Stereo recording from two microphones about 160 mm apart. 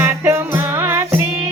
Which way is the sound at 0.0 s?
15° right (ahead or behind).